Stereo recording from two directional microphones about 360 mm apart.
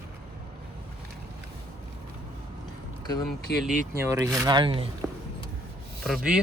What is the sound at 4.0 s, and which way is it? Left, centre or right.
Speech, centre.